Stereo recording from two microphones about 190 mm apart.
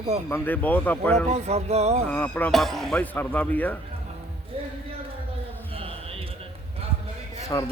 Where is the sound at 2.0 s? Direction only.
10° left (ahead or behind).